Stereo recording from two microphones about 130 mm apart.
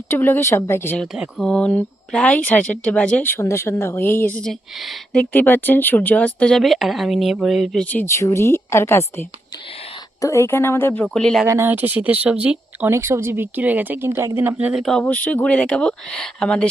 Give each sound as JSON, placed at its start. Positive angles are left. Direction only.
{"t": 0.1, "sound": "a woman's voice", "side_deg": 15}
{"t": 0.9, "sound": "speech", "side_deg": 0}
{"t": 1.5, "sound": "speech", "side_deg": 10}
{"t": 4.4, "sound": "speech", "side_deg": 0}
{"t": 5.2, "sound": "speech", "side_deg": 15}
{"t": 7.9, "sound": "a woman's voice", "side_deg": 20}
{"t": 11.4, "sound": "speech", "side_deg": -20}
{"t": 12.9, "sound": "speech", "side_deg": -20}
{"t": 14.7, "sound": "speech", "side_deg": 0}
{"t": 15.0, "sound": "speech", "side_deg": 10}